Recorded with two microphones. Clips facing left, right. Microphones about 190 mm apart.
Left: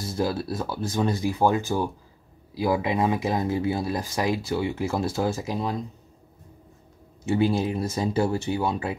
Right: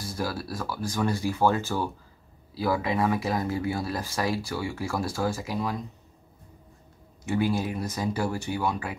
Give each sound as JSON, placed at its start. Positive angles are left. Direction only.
{"t": 0.0, "sound": "speech", "side_deg": 25}
{"t": 7.2, "sound": "speech", "side_deg": 25}